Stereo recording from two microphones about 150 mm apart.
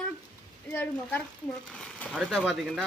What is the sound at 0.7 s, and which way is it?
Speech, 10° left (ahead or behind).